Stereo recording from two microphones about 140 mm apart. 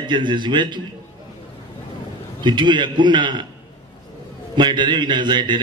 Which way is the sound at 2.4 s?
35° right (ahead or behind).